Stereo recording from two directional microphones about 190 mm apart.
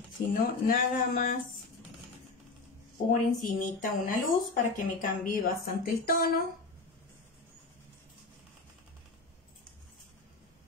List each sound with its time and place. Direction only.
0.3 s a woman's voice: 45° left (ahead or behind)
3.1 s a woman's voice: 40° left (ahead or behind)